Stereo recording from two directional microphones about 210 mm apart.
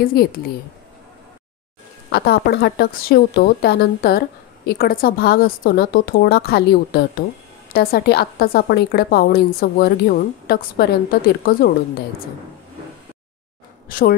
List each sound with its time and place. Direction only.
0.0 s a woman's voice: 45° left (ahead or behind)
2.0 s a woman's voice: 50° left (ahead or behind)
13.8 s speech: 40° left (ahead or behind)